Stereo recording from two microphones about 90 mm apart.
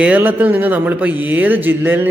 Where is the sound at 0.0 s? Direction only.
20° right (ahead or behind).